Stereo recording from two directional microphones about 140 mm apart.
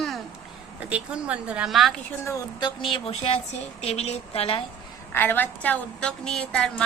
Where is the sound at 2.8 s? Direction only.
40° left (ahead or behind).